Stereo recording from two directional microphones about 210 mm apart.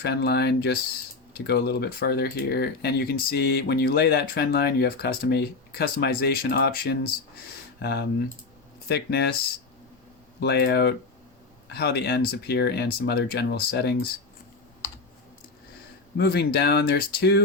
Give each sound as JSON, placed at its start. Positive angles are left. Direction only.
{"t": 0.0, "sound": "speech", "side_deg": 50}
{"t": 10.4, "sound": "speech", "side_deg": 50}
{"t": 16.1, "sound": "speech", "side_deg": 50}